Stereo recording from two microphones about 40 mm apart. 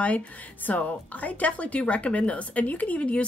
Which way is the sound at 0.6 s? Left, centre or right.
Left.